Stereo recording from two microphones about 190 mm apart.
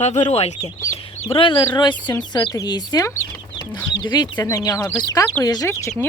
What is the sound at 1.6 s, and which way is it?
Speech, 25° left (ahead or behind).